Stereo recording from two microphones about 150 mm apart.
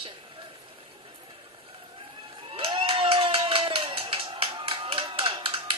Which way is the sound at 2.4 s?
35° right (ahead or behind).